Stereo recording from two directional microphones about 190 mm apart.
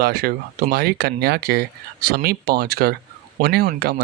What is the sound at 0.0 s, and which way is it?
Speech, 55° right (ahead or behind).